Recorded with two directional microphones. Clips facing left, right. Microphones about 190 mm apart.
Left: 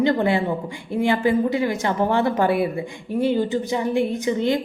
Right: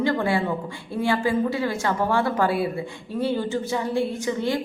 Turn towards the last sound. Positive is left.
turn(degrees=20)  # may be behind; listen again after turning